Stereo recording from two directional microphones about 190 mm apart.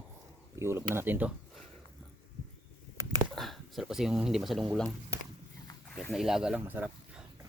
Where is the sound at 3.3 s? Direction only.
Centre (ahead or behind).